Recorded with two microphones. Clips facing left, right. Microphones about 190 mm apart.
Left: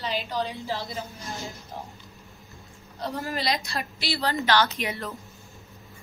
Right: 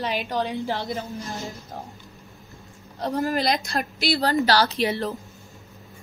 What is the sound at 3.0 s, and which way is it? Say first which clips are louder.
A woman's voice: right 6 dB; 45° right (ahead or behind).